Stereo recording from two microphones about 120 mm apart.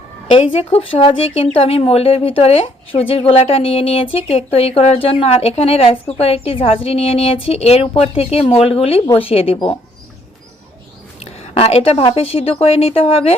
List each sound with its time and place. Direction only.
0.3 s speech: 45° left (ahead or behind)
11.2 s a sound: 55° left (ahead or behind)
12.1 s speech: 50° left (ahead or behind)